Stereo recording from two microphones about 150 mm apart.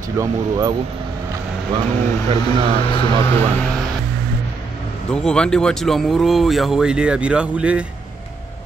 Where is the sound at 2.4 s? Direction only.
35° left (ahead or behind).